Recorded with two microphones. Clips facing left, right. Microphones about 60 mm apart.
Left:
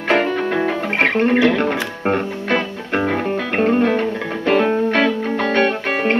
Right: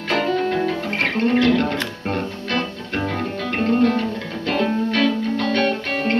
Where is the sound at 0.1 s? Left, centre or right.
Left.